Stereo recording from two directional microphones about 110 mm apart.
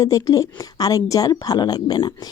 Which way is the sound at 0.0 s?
35° left (ahead or behind).